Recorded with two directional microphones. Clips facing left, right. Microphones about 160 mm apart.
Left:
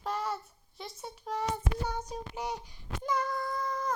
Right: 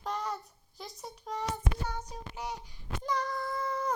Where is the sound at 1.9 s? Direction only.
15° left (ahead or behind).